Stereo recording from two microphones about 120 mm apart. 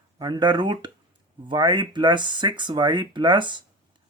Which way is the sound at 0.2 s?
35° right (ahead or behind).